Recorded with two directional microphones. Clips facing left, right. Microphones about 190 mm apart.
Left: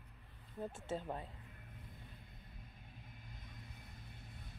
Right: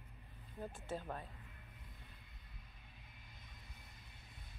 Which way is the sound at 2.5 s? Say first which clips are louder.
Left 5 dB; 45° left (ahead or behind).